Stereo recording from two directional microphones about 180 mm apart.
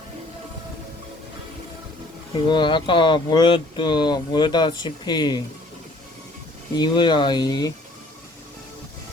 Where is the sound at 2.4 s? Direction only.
25° left (ahead or behind).